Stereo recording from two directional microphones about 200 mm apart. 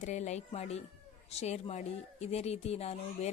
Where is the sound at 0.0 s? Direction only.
35° left (ahead or behind).